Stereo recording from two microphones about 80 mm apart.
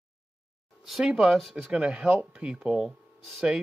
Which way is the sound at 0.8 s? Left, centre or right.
Centre.